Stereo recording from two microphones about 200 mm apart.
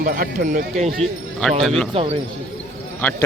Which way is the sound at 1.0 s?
Centre (ahead or behind).